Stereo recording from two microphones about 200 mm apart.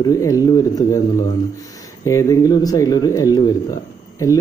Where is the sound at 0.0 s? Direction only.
15° left (ahead or behind).